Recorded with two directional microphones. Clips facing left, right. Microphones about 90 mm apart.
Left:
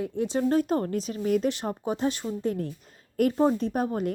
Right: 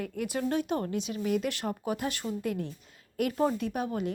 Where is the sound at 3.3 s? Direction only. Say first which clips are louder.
Left 5 dB; 25° left (ahead or behind); by 4.1 s 40° left (ahead or behind).